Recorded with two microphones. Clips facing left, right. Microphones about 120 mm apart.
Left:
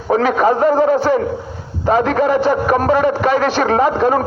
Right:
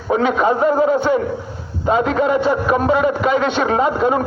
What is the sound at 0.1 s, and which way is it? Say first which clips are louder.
Speech: left 2 dB; 50° left (ahead or behind).